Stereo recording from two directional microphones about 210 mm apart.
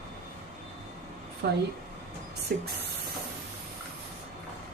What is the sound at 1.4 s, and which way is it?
Speech, 50° right (ahead or behind).